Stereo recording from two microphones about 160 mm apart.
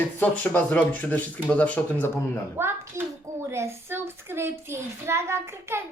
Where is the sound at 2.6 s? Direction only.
15° right (ahead or behind).